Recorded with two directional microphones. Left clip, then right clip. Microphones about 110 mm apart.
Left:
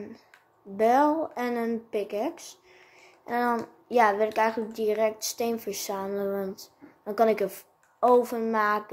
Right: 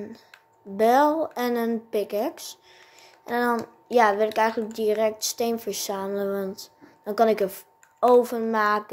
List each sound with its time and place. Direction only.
0.7 s a woman's voice: 30° right (ahead or behind)